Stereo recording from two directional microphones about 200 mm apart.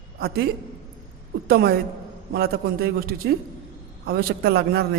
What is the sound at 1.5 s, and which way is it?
A man's voice, 50° right (ahead or behind).